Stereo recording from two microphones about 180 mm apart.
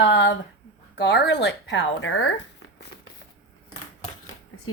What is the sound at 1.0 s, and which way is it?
Speech, 70° left (ahead or behind).